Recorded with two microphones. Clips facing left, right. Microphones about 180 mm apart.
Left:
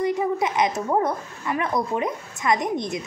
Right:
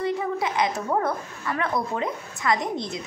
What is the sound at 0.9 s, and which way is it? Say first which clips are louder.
Speech: left 2 dB; 20° left (ahead or behind).